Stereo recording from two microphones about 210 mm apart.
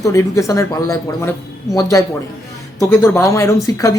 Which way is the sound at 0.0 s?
15° left (ahead or behind).